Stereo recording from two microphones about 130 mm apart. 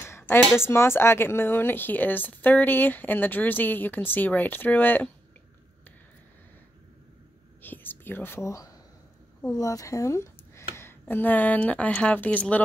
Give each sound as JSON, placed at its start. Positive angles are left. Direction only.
{"t": 0.0, "sound": "a sound", "side_deg": 20}
{"t": 0.7, "sound": "speech", "side_deg": 20}
{"t": 7.6, "sound": "speech", "side_deg": 15}